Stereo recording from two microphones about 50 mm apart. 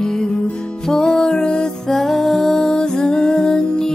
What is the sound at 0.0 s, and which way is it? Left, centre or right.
Music, centre.